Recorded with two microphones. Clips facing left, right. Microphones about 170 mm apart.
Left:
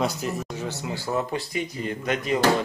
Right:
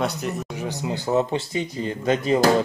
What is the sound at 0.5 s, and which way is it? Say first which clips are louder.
Speech: right 3 dB; 15° right (ahead or behind).